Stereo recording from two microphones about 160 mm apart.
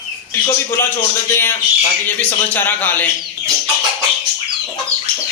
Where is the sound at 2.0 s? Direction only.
10° left (ahead or behind).